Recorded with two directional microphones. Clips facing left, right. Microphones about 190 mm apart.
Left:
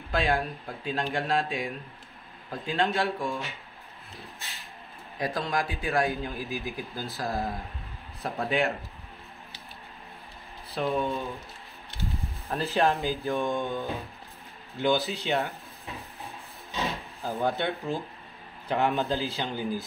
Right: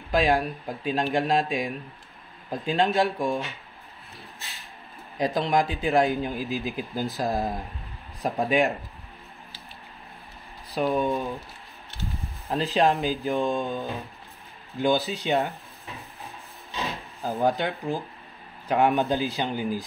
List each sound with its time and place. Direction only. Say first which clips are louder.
0.1 s speech: right 5 dB; 15° right (ahead or behind)
5.1 s speech: right 6 dB; 20° right (ahead or behind)
10.7 s speech: right 4 dB; 15° right (ahead or behind)
12.4 s speech: right 3 dB; 15° right (ahead or behind)
15.0 s speech: right 3 dB; 15° right (ahead or behind)
17.2 s speech: right 4 dB; 15° right (ahead or behind)